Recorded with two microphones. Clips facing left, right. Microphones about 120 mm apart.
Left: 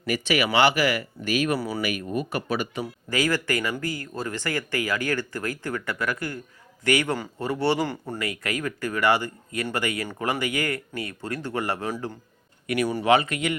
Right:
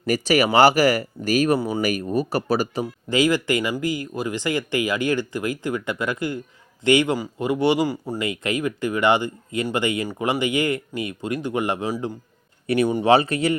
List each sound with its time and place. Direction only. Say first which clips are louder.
0.0 s speech: right 5 dB; 40° right (ahead or behind)
1.5 s speech: right 5 dB; 25° right (ahead or behind)
1.8 s speech: right 5 dB; 35° right (ahead or behind)
2.8 s speech: right 5 dB; 20° right (ahead or behind)
8.2 s speech: right 5 dB; 20° right (ahead or behind)
12.6 s speech: right 4 dB; 25° right (ahead or behind)